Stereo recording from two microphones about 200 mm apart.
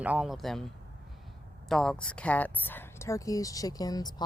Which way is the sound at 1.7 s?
5° left (ahead or behind).